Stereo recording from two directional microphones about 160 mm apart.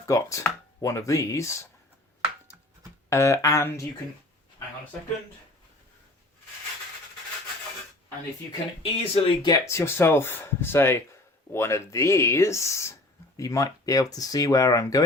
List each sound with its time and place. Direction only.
0.0 s speech: 20° left (ahead or behind)
2.5 s a sound: 10° right (ahead or behind)
3.1 s speech: 15° left (ahead or behind)
8.8 s speech: 35° left (ahead or behind)
9.5 s speech: 15° left (ahead or behind)